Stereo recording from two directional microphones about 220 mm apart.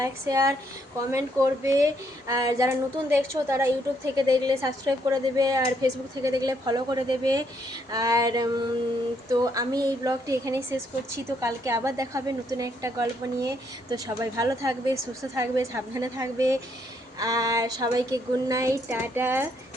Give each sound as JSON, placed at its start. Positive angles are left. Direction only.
{"t": 0.0, "sound": "speech", "side_deg": -15}